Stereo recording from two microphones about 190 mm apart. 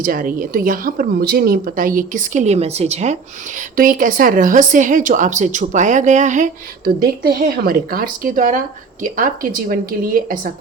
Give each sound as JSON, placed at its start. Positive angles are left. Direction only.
{"t": 0.0, "sound": "a woman's voice", "side_deg": -45}